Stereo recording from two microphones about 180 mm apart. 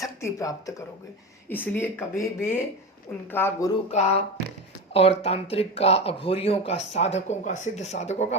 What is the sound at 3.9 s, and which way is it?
Speech, 40° left (ahead or behind).